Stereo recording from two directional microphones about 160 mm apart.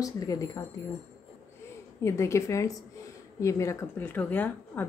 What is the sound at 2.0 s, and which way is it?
Speech, 15° left (ahead or behind).